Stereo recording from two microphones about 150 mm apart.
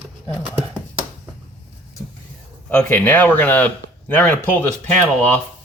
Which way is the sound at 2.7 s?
10° left (ahead or behind).